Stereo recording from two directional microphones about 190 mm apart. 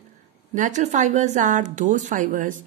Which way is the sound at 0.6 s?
40° right (ahead or behind).